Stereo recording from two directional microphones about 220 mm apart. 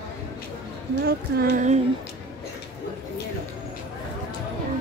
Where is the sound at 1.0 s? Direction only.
45° right (ahead or behind).